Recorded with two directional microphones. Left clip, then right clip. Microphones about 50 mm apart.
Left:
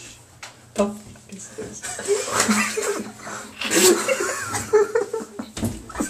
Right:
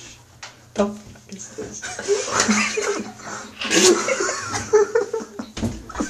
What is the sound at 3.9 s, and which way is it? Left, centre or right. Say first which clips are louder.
Laughter: right 1 dB; right.